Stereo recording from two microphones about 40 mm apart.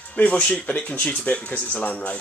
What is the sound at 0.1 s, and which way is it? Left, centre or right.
Speech, left.